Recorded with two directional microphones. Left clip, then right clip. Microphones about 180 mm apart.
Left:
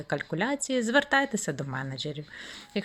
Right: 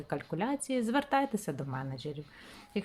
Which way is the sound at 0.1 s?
10° left (ahead or behind).